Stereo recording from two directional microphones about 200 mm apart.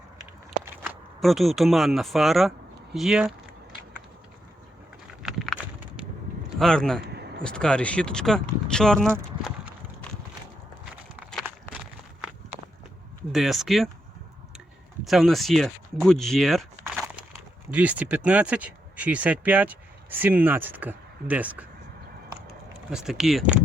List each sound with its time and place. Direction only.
0.2 s walk: 10° right (ahead or behind)
1.2 s speech: centre (ahead or behind)
5.2 s a sound: centre (ahead or behind)
6.6 s speech: 5° left (ahead or behind)
7.1 s a sound: 55° right (ahead or behind)
7.4 s speech: 5° left (ahead or behind)
11.3 s a sound: 5° left (ahead or behind)
13.3 s speech: centre (ahead or behind)
15.0 s speech: centre (ahead or behind)
17.7 s speech: 5° right (ahead or behind)
22.9 s speech: 5° right (ahead or behind)